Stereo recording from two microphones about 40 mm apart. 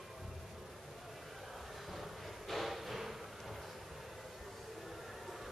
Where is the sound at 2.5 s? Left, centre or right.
Centre.